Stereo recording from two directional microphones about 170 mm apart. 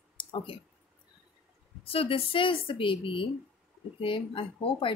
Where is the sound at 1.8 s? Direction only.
35° left (ahead or behind).